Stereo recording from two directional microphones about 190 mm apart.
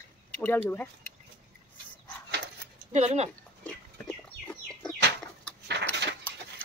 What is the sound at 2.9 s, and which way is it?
Speech, 35° right (ahead or behind).